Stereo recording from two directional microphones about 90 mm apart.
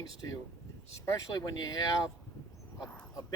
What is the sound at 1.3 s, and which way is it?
Speech, 45° left (ahead or behind).